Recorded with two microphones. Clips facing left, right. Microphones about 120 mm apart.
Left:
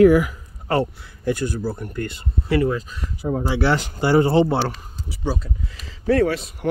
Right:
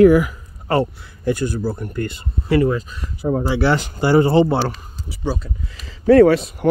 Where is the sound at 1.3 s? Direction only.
35° right (ahead or behind).